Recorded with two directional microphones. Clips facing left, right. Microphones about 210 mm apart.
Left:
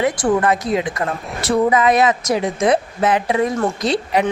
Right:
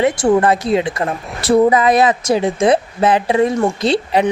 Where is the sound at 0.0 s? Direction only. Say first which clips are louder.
Right 4 dB; 25° right (ahead or behind).